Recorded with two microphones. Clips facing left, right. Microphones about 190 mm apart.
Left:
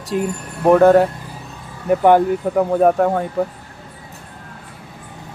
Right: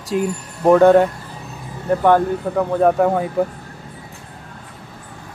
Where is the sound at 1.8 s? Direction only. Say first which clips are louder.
Left 2 dB; 15° left (ahead or behind); by 3.4 s centre (ahead or behind).